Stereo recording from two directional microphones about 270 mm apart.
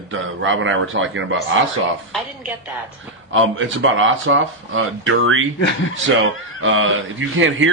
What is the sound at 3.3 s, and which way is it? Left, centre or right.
Speech, right.